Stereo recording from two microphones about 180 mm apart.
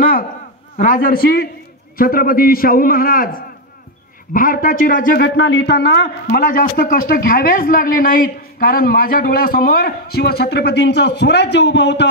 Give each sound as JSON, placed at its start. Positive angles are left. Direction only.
{"t": 0.7, "sound": "a man's voice", "side_deg": 50}